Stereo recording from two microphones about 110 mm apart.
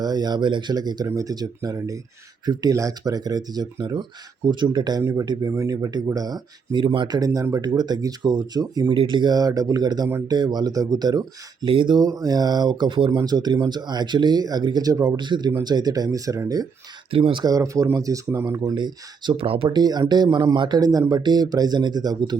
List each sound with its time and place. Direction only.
0.0 s speech: 40° right (ahead or behind)
11.7 s speech: 50° right (ahead or behind)
11.9 s speech: 35° right (ahead or behind)
13.1 s speech: 35° right (ahead or behind)
17.1 s speech: 55° right (ahead or behind)
17.4 s speech: 30° right (ahead or behind)
18.8 s speech: 45° right (ahead or behind)
19.7 s speech: 40° right (ahead or behind)